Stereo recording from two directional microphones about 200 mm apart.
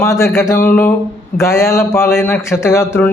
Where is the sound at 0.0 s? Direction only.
15° left (ahead or behind).